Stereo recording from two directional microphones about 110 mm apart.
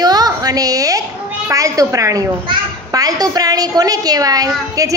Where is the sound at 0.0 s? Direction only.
35° right (ahead or behind).